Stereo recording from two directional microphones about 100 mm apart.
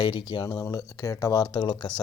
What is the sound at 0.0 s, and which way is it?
Speech, 50° left (ahead or behind).